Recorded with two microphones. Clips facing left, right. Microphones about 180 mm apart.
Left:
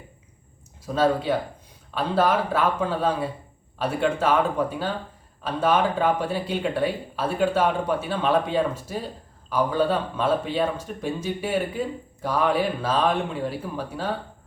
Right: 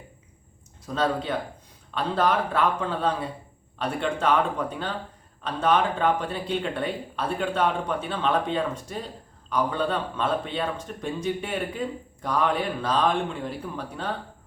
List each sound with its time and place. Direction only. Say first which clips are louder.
0.9 s speech: left 4 dB; 5° left (ahead or behind)